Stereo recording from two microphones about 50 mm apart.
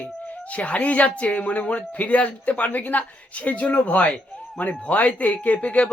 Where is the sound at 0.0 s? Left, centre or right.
Left.